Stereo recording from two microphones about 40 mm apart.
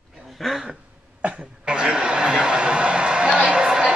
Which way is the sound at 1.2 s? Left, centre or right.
Right.